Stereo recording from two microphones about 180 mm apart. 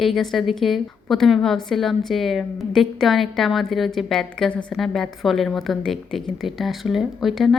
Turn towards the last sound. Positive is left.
turn(degrees=0)  # may be behind; listen again after turning